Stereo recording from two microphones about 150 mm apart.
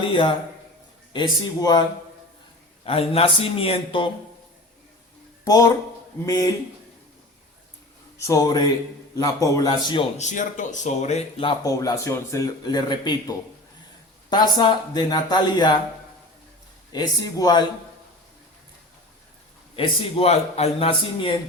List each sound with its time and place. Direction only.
0.0 s a man's voice: 35° left (ahead or behind)
2.8 s a man's voice: 40° left (ahead or behind)
5.5 s a man's voice: 25° left (ahead or behind)
8.2 s a man's voice: 25° left (ahead or behind)
10.2 s speech: 55° left (ahead or behind)
11.6 s a man's voice: 20° left (ahead or behind)
16.9 s a man's voice: 25° left (ahead or behind)
19.7 s a man's voice: 35° left (ahead or behind)